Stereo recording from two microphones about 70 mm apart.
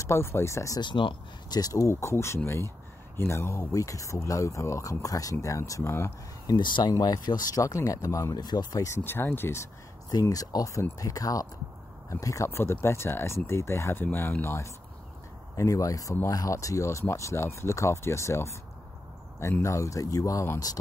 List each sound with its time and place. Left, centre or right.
0.0 s speech: left
1.5 s speech: left
3.7 s speech: left
6.4 s speech: left
8.4 s speech: left
8.8 s speech: left
10.3 s speech: left
12.4 s speech: left
13.9 s speech: left
15.5 s speech: left
19.6 s speech: left